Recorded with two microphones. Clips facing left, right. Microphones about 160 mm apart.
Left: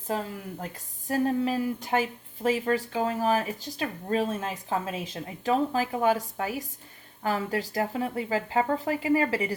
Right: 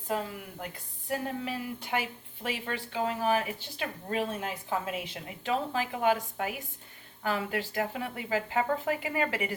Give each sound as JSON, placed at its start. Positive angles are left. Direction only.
{"t": 0.1, "sound": "speech", "side_deg": 40}
{"t": 5.5, "sound": "speech", "side_deg": 40}